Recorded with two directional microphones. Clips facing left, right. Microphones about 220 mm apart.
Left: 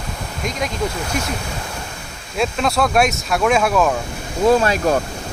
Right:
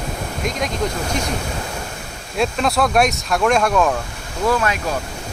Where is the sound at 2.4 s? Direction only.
Centre (ahead or behind).